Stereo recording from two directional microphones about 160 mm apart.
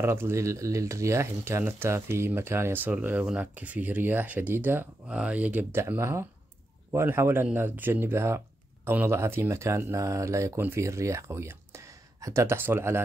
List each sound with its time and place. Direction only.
0.0 s speech: 15° right (ahead or behind)